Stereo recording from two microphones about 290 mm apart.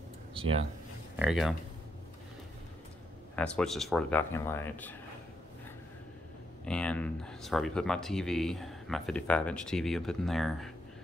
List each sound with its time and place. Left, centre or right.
0.3 s speech: centre
1.2 s speech: centre
3.3 s speech: centre
6.6 s speech: centre